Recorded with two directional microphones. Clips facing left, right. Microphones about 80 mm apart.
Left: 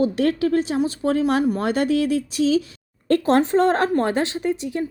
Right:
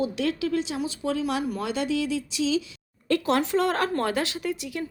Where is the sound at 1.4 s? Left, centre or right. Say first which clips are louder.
Left 8 dB; left.